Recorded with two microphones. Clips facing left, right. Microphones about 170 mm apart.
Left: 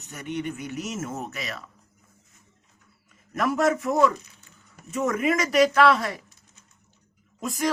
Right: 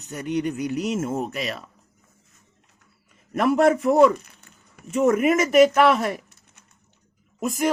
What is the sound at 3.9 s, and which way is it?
Speech, 60° right (ahead or behind).